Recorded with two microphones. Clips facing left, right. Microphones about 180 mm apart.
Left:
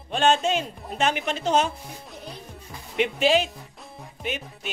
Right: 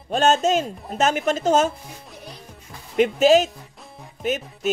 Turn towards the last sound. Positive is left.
turn(degrees=-40)  # may be behind; listen again after turning